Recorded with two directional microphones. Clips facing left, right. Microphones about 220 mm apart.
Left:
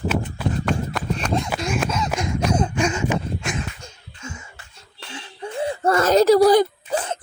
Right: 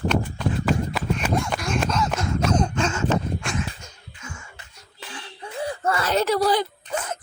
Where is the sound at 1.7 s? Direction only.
5° left (ahead or behind).